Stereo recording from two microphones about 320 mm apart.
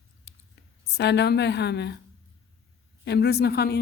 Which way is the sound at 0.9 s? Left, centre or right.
Left.